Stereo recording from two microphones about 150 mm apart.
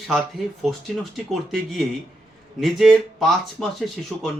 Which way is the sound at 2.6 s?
Centre (ahead or behind).